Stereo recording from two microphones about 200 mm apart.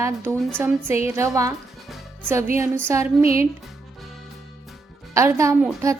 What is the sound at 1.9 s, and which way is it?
Music, 10° right (ahead or behind).